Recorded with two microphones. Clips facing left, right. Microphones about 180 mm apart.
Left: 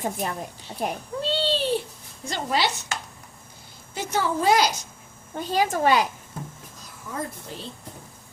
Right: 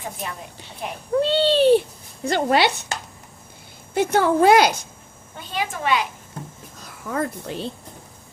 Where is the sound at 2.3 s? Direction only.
65° right (ahead or behind).